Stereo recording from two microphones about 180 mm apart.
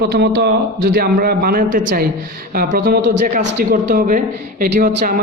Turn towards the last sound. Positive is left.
turn(degrees=-50)  # may be behind; listen again after turning